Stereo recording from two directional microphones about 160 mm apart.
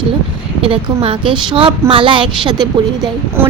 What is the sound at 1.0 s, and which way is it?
A woman's voice, 35° right (ahead or behind).